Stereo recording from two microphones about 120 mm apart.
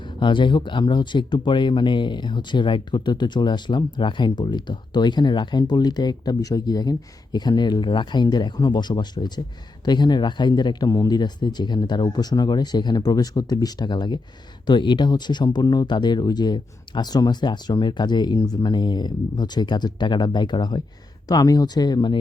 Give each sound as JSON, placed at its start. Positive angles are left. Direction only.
{"t": 0.2, "sound": "speech", "side_deg": 40}